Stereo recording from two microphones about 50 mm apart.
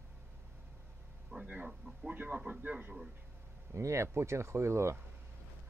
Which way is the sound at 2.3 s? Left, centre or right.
Centre.